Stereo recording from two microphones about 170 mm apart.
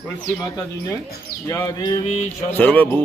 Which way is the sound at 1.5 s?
20° left (ahead or behind).